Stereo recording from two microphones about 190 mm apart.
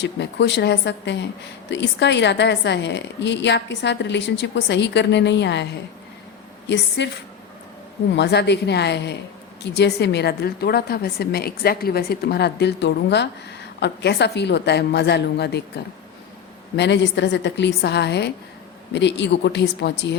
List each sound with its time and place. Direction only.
0.0 s a woman's voice: 65° left (ahead or behind)
6.7 s speech: 65° left (ahead or behind)
8.1 s a woman's voice: 65° left (ahead or behind)